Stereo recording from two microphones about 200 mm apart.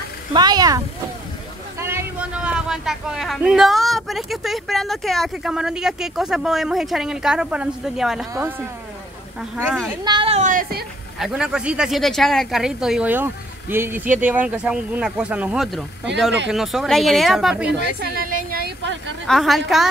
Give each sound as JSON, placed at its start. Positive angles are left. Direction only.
{"t": 0.3, "sound": "a man's voice", "side_deg": -20}
{"t": 9.4, "sound": "a man's voice", "side_deg": 5}
{"t": 10.0, "sound": "a sound", "side_deg": -25}
{"t": 11.1, "sound": "a man's voice", "side_deg": 0}
{"t": 18.1, "sound": "a woman's voice", "side_deg": -45}
{"t": 19.2, "sound": "a man's voice", "side_deg": 0}